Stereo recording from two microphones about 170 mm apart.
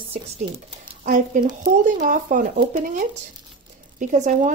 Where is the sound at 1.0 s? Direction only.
50° right (ahead or behind).